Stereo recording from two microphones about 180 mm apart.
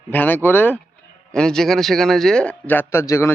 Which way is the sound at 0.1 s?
10° left (ahead or behind).